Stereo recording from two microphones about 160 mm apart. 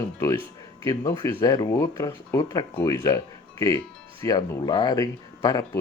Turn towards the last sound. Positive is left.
turn(degrees=20)  # may be behind; listen again after turning